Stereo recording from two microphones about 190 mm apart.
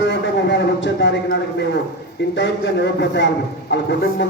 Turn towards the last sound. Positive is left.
turn(degrees=65)  # may be behind; listen again after turning